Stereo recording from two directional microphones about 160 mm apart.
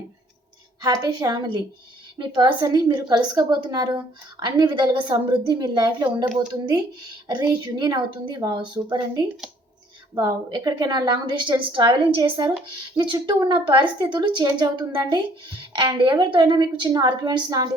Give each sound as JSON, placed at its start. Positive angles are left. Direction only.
{"t": 0.8, "sound": "a woman's voice", "side_deg": -25}